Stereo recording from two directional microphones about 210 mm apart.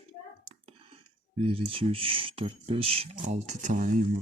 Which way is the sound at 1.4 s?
25° right (ahead or behind).